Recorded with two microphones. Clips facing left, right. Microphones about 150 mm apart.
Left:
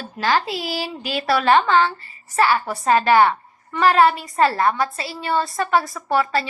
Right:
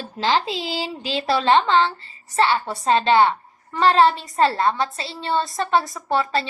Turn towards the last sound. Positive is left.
turn(degrees=-25)  # may be behind; listen again after turning